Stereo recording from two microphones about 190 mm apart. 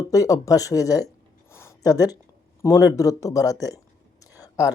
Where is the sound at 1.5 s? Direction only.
15° left (ahead or behind).